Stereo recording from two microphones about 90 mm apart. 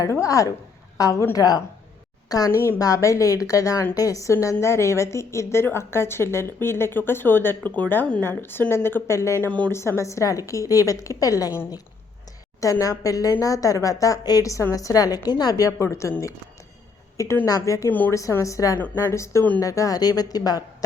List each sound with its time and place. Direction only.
0.0 s a woman's voice: 35° left (ahead or behind)
9.5 s speech: 15° left (ahead or behind)
9.7 s a woman's voice: 30° left (ahead or behind)
12.8 s a woman's voice: 40° left (ahead or behind)
17.4 s a woman's voice: 40° left (ahead or behind)
17.8 s a woman's voice: 20° left (ahead or behind)
18.1 s a woman's voice: 35° left (ahead or behind)